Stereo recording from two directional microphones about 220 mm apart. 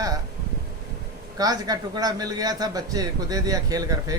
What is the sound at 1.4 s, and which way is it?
A man's voice, 15° right (ahead or behind).